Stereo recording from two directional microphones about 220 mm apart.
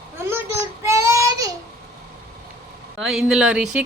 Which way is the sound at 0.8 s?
15° right (ahead or behind).